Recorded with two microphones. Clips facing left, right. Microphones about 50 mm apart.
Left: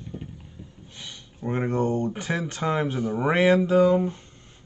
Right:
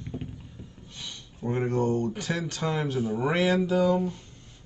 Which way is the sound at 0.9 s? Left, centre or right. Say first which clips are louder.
Even; centre.